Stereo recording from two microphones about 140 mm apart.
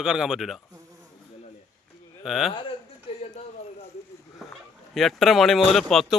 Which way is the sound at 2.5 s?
35° left (ahead or behind).